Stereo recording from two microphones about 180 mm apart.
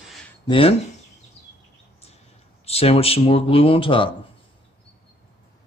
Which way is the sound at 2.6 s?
35° left (ahead or behind).